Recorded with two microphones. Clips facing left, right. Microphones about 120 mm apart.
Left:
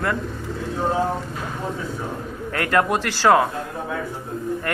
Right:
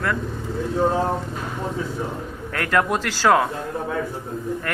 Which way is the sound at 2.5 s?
15° left (ahead or behind).